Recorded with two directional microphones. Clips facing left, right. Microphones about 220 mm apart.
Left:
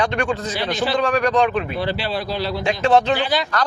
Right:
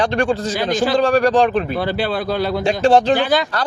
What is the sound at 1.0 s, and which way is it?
Speech, 30° right (ahead or behind).